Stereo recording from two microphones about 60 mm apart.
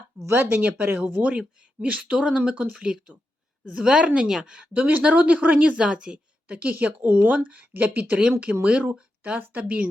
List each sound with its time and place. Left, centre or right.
0.3 s speech: right
1.2 s speech: centre
4.7 s speech: right
6.6 s speech: right